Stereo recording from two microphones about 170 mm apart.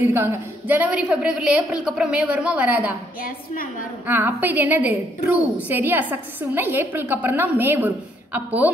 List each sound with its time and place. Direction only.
0.0 s a woman's voice: 15° right (ahead or behind)
4.1 s a woman's voice: 10° right (ahead or behind)